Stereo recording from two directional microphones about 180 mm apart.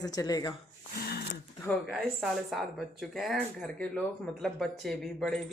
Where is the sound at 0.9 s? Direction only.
60° left (ahead or behind).